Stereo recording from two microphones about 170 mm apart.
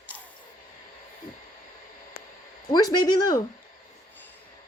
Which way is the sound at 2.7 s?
25° left (ahead or behind).